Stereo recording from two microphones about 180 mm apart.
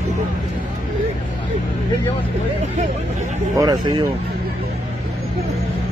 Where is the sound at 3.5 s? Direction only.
20° right (ahead or behind).